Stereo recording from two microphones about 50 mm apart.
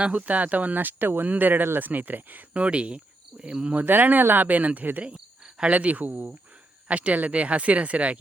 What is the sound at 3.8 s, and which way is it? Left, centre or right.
Speech, right.